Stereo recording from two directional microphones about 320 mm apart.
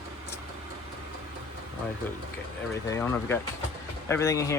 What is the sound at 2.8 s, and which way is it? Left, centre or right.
Speech, centre.